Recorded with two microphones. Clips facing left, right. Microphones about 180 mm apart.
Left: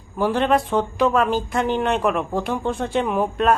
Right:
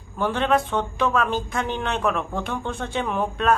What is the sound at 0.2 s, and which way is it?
Speech, 10° left (ahead or behind).